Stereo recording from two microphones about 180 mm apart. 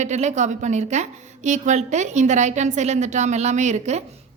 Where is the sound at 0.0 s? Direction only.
40° right (ahead or behind).